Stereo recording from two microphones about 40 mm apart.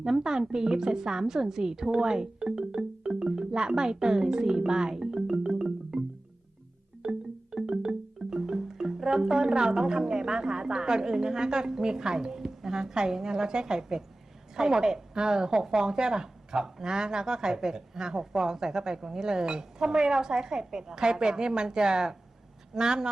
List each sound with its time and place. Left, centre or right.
0.2 s a woman's voice: centre
7.0 s music: centre
14.5 s a woman's voice: centre